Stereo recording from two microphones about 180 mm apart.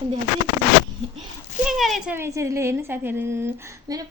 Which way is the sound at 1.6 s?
Centre (ahead or behind).